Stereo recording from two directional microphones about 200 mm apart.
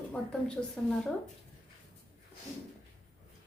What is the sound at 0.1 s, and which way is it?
Speech, 5° left (ahead or behind).